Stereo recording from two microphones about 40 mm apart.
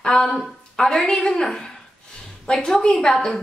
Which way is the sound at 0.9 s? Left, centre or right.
Left.